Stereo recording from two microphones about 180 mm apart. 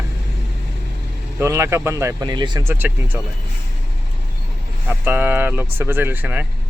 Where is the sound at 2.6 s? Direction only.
10° right (ahead or behind).